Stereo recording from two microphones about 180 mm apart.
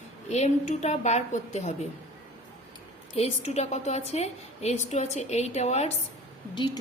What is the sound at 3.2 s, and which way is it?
A woman's voice, 35° left (ahead or behind).